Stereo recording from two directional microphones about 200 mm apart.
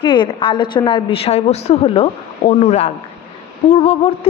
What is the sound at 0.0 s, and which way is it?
A woman's voice, 25° left (ahead or behind).